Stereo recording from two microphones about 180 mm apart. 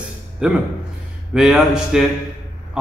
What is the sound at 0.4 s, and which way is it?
A man's voice, 5° right (ahead or behind).